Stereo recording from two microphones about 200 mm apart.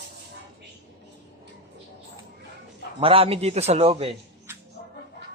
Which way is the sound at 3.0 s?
30° right (ahead or behind).